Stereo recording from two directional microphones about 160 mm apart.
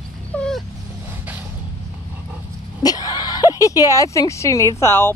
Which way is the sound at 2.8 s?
25° left (ahead or behind).